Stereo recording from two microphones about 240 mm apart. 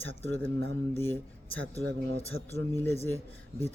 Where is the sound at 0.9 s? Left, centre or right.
Centre.